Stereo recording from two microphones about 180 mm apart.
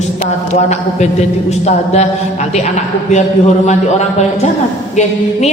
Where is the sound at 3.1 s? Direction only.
40° left (ahead or behind).